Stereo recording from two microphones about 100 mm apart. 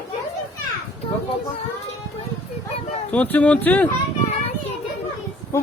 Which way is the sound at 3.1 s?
15° left (ahead or behind).